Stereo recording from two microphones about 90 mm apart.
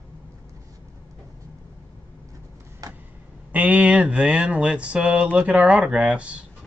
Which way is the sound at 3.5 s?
15° right (ahead or behind).